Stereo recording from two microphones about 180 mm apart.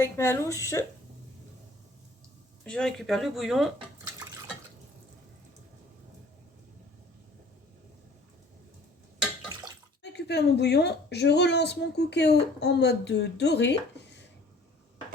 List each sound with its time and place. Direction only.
0.0 s speech: 15° left (ahead or behind)
2.6 s speech: 5° left (ahead or behind)
10.0 s a woman's voice: 70° left (ahead or behind)